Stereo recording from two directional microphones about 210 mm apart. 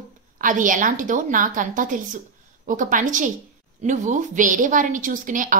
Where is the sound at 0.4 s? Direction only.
40° right (ahead or behind).